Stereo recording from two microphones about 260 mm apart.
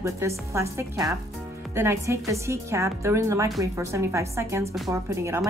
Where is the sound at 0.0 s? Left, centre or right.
Centre.